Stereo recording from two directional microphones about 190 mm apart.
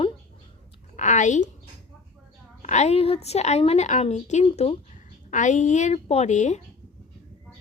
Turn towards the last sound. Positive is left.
turn(degrees=40)  # may be behind; listen again after turning